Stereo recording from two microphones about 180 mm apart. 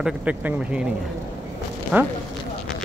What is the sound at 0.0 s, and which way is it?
Speech, 5° right (ahead or behind).